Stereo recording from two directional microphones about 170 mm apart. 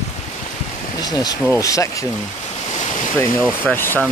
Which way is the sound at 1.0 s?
20° left (ahead or behind).